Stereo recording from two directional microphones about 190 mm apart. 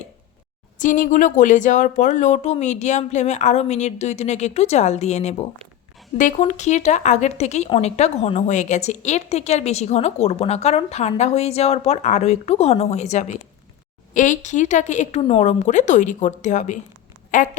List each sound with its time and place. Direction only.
0.8 s a woman's voice: 45° left (ahead or behind)